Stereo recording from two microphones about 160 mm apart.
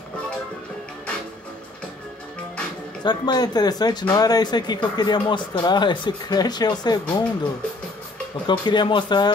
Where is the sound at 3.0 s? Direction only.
25° left (ahead or behind).